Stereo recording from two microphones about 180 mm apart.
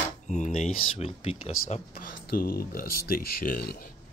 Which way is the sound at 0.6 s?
35° left (ahead or behind).